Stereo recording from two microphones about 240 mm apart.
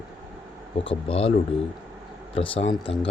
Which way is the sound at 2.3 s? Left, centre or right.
Left.